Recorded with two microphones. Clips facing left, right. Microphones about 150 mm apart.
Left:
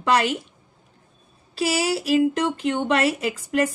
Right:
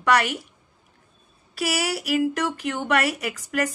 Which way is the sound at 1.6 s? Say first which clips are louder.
Left 3 dB; 25° left (ahead or behind).